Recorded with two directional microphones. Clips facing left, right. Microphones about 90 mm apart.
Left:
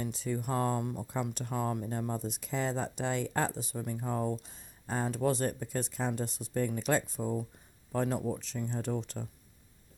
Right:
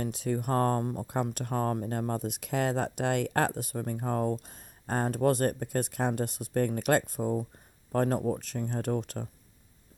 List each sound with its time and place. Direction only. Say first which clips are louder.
0.0 s speech: right 4 dB; 60° right (ahead or behind)